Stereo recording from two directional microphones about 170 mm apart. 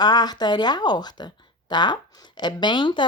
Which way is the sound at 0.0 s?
25° left (ahead or behind).